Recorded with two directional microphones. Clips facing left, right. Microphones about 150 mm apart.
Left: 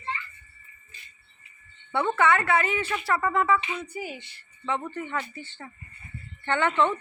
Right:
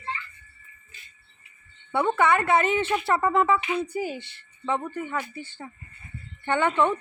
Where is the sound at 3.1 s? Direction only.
20° right (ahead or behind).